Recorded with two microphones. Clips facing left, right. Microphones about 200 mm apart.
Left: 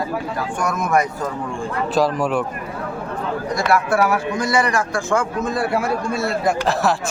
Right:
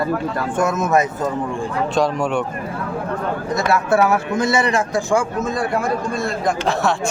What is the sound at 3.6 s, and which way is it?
A man's voice, 25° right (ahead or behind).